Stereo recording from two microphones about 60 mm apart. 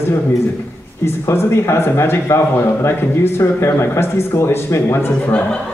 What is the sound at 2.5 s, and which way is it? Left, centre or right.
A man's voice, left.